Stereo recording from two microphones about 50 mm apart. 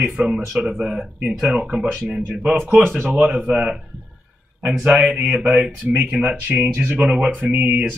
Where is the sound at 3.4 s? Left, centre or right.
Right.